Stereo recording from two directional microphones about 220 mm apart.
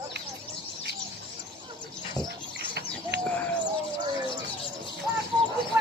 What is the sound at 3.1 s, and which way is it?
Bird, 50° right (ahead or behind).